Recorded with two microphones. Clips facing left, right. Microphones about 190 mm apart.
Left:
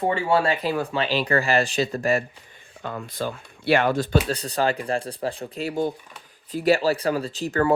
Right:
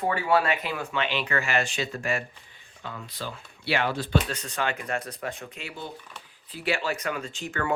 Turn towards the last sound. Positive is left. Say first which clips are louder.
# left 8 dB
turn(degrees=35)  # may be behind; listen again after turning